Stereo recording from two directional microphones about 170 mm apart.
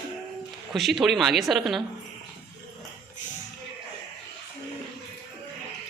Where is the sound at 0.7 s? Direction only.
Centre (ahead or behind).